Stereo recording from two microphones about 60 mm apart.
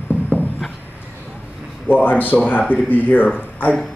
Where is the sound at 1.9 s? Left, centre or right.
Left.